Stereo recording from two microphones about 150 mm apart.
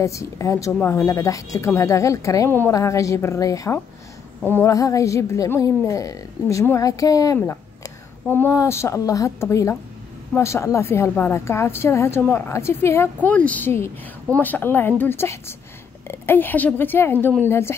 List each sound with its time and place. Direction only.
0.0 s a woman's voice: 20° left (ahead or behind)